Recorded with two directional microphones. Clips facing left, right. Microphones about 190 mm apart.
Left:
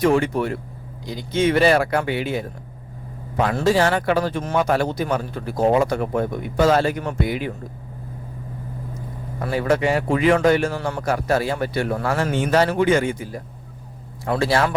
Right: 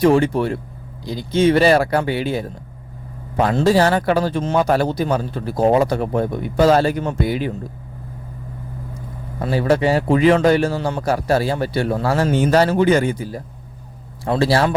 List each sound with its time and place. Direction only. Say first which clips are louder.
0.0 s speech: right 3 dB; 30° right (ahead or behind)
3.5 s speech: right 3 dB; 35° right (ahead or behind)
9.4 s speech: right 3 dB; 30° right (ahead or behind)